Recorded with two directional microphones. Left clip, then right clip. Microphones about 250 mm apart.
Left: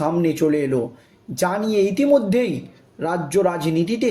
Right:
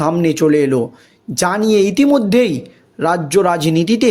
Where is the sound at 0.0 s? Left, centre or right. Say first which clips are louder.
Right 5 dB; right.